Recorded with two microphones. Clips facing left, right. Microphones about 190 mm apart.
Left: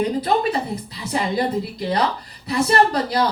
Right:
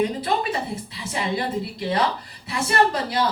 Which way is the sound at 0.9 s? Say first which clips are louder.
Left 3 dB; 40° left (ahead or behind).